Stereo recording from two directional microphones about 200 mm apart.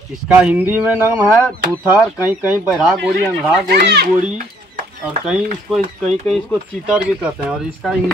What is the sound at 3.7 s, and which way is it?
Speech, 55° right (ahead or behind).